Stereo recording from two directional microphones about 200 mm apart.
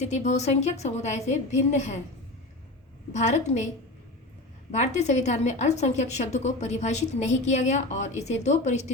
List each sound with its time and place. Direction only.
0.0 s a woman's voice: 35° left (ahead or behind)
3.1 s a woman's voice: 35° left (ahead or behind)
4.7 s a woman's voice: 35° left (ahead or behind)